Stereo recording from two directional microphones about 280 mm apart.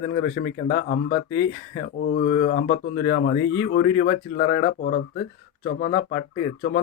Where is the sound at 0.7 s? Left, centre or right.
Left.